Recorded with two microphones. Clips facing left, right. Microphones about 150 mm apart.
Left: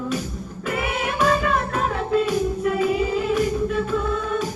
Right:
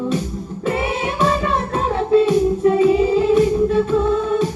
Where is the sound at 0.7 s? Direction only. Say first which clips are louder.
Right 4 dB; 30° right (ahead or behind).